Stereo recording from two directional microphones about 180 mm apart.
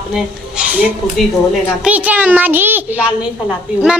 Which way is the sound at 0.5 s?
5° right (ahead or behind).